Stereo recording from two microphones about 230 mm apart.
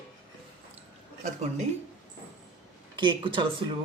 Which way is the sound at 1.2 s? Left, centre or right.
Right.